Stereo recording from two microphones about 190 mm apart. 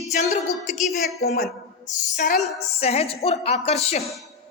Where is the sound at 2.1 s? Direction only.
45° left (ahead or behind).